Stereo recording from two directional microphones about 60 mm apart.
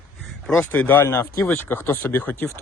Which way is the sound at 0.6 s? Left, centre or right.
Left.